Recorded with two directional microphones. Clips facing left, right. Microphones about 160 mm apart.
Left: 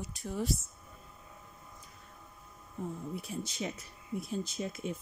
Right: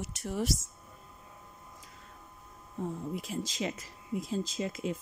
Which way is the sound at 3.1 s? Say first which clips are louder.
Right 3 dB; 90° right.